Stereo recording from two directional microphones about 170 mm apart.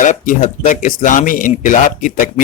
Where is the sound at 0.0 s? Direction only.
50° left (ahead or behind).